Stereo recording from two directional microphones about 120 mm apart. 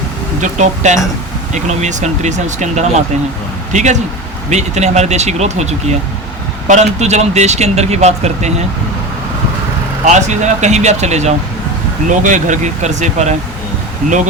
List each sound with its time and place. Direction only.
0.6 s speech: 85° right
4.4 s speech: 75° right (ahead or behind)
10.1 s speech: 80° right
12.0 s speech: 90° right; by 13.3 s 75° right (ahead or behind)